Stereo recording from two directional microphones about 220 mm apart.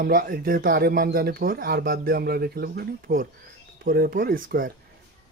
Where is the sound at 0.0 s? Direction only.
40° right (ahead or behind).